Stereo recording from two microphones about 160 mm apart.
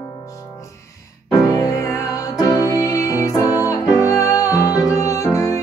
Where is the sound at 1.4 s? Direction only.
25° left (ahead or behind).